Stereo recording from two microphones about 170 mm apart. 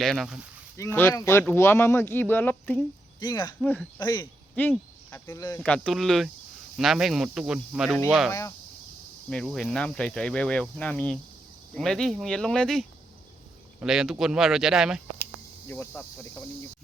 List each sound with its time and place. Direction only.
0.0 s speech: centre (ahead or behind)
0.8 s speech: 15° left (ahead or behind)
3.2 s speech: 25° left (ahead or behind)
3.6 s speech: 5° left (ahead or behind)
4.0 s speech: 25° left (ahead or behind)
4.5 s speech: 10° left (ahead or behind)
5.6 s speech: 5° left (ahead or behind)
8.3 s speech: 15° left (ahead or behind)
9.3 s speech: 5° left (ahead or behind)
13.8 s speech: centre (ahead or behind)
15.2 s cricket: 15° left (ahead or behind)